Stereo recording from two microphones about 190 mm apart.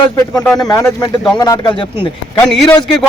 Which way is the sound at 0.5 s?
20° left (ahead or behind).